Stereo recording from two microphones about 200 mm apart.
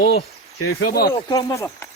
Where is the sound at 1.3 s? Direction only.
15° left (ahead or behind).